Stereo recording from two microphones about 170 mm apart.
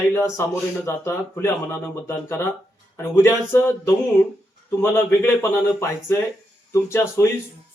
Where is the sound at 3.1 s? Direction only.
15° left (ahead or behind).